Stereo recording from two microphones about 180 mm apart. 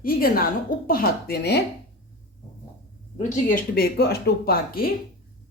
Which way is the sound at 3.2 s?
45° left (ahead or behind).